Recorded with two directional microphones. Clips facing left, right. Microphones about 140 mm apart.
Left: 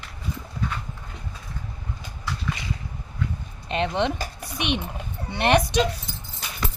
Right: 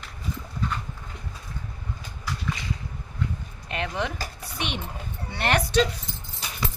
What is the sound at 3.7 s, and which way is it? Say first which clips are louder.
A woman's voice: left 6 dB; 25° left (ahead or behind).